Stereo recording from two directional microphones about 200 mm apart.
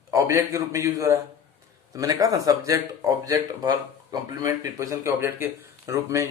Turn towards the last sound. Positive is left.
turn(degrees=-15)  # may be behind; listen again after turning